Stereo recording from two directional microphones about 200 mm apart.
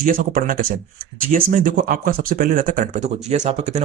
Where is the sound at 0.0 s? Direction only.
45° right (ahead or behind).